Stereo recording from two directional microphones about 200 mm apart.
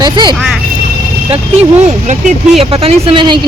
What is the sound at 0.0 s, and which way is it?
Speech, 20° right (ahead or behind).